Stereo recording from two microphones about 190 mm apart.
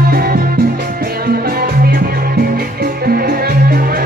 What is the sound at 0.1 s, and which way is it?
Music, 50° right (ahead or behind).